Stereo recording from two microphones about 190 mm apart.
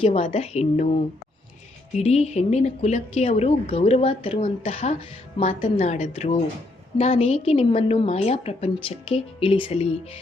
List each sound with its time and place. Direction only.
0.0 s speech: 30° left (ahead or behind)
2.0 s speech: 35° left (ahead or behind)